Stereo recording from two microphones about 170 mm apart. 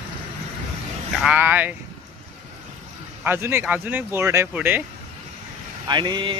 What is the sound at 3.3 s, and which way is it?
Speech, 15° right (ahead or behind).